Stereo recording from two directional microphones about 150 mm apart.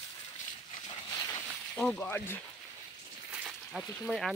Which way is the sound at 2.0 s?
10° left (ahead or behind).